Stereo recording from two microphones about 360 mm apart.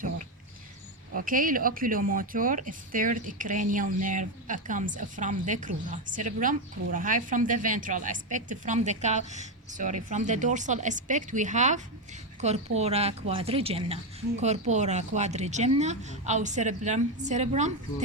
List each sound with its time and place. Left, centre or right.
1.1 s speech: right